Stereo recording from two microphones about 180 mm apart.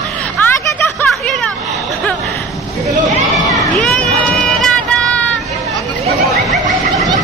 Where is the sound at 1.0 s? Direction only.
5° left (ahead or behind).